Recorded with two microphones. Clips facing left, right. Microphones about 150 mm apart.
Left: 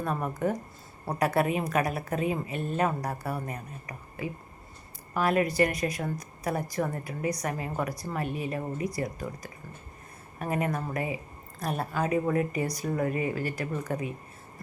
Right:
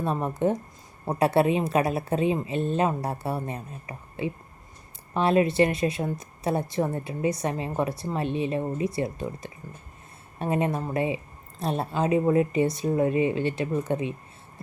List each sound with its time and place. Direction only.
0.0 s speech: 25° right (ahead or behind)